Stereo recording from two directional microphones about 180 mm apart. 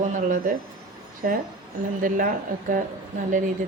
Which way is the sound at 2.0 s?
50° right (ahead or behind).